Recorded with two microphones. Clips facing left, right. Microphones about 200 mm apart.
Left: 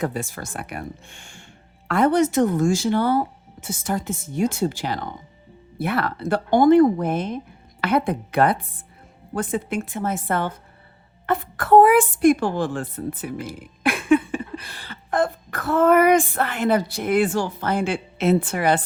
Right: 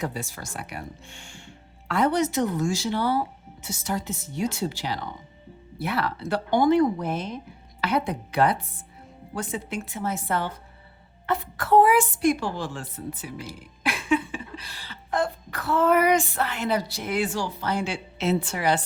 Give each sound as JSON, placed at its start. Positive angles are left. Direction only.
{"t": 0.0, "sound": "a woman's voice", "side_deg": 50}